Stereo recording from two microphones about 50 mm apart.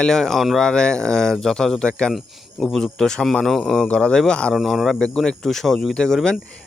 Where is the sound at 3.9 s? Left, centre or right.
Left.